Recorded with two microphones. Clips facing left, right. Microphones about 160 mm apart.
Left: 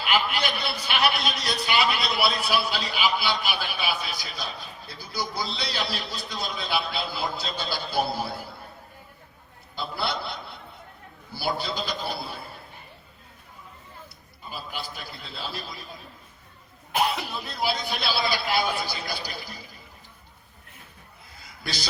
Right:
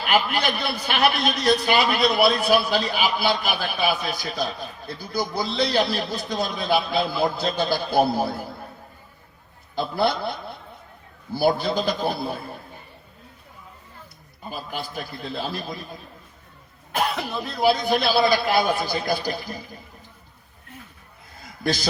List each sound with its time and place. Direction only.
0.0 s a man's voice: 45° right (ahead or behind)
9.7 s a man's voice: 45° right (ahead or behind)
14.5 s a man's voice: 45° right (ahead or behind)
17.6 s a man's voice: 50° right (ahead or behind)
21.4 s a sound: 50° right (ahead or behind)